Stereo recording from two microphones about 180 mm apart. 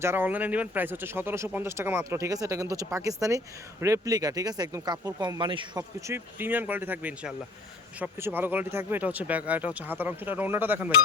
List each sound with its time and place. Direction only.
0.0 s speech: 10° right (ahead or behind)
6.1 s speech: 10° right (ahead or behind)